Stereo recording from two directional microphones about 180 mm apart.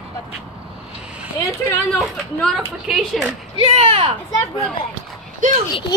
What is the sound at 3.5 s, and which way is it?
Speech, 35° right (ahead or behind).